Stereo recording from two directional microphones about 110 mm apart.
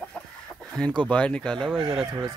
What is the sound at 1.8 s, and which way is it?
Speech, 60° right (ahead or behind).